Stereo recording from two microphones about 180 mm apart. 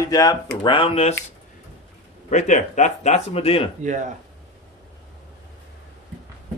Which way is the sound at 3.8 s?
45° right (ahead or behind).